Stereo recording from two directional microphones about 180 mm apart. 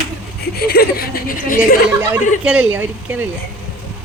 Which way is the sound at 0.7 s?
60° left (ahead or behind).